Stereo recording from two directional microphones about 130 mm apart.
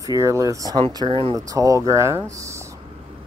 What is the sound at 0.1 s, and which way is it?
Speech, 25° right (ahead or behind).